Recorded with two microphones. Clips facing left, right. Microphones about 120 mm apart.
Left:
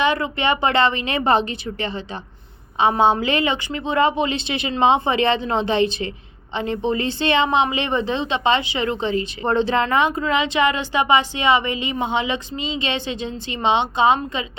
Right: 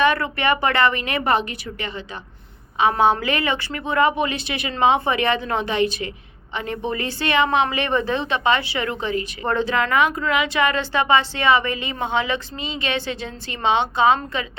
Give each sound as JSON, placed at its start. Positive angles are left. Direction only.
{"t": 0.0, "sound": "a woman's voice", "side_deg": 20}